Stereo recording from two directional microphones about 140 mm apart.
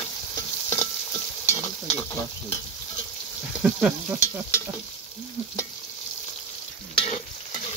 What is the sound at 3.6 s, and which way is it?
Sizzle, 5° right (ahead or behind).